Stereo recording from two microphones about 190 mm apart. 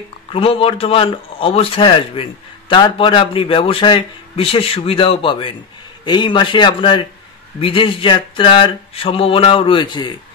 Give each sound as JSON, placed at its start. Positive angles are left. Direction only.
{"t": 0.3, "sound": "a man's voice", "side_deg": 30}